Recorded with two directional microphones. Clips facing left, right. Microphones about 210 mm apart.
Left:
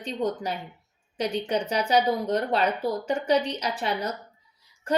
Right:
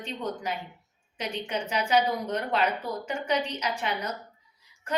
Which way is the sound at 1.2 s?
35° left (ahead or behind).